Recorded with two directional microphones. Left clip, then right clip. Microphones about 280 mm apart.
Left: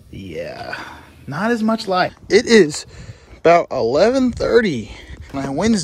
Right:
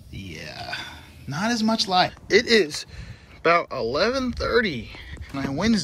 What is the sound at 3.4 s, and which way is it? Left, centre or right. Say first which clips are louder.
Speech: left 7 dB; left.